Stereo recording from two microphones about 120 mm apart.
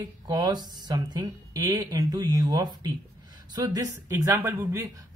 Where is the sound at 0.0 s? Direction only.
35° right (ahead or behind).